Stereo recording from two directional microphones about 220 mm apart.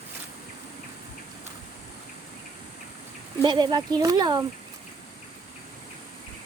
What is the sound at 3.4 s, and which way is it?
Speech, 20° right (ahead or behind).